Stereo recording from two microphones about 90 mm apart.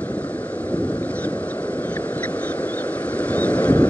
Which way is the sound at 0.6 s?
15° left (ahead or behind).